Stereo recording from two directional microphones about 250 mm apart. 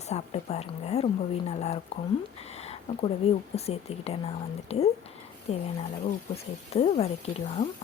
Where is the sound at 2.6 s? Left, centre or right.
Left.